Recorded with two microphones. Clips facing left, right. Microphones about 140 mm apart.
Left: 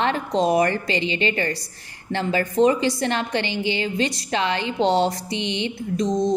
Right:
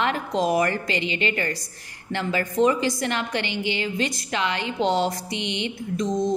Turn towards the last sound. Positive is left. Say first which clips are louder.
# left 2 dB
turn(degrees=30)  # may be behind; listen again after turning